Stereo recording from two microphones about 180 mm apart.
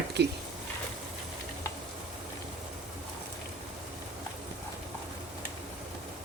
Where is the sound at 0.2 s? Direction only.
70° right (ahead or behind).